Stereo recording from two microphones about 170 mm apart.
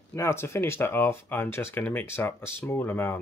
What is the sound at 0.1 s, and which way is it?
Speech, 15° left (ahead or behind).